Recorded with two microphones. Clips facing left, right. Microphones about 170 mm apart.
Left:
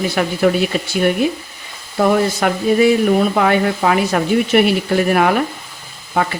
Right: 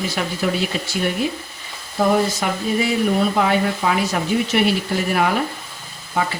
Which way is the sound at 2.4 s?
65° left (ahead or behind).